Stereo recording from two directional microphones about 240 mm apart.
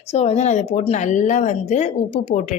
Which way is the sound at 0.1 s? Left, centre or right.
Left.